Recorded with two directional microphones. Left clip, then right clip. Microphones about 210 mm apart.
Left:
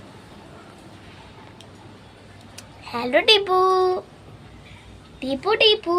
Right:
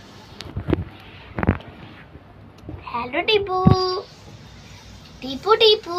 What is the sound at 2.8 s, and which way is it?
Speech, 55° left (ahead or behind).